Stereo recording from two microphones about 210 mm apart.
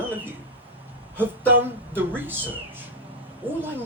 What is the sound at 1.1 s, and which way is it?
Speech, 10° right (ahead or behind).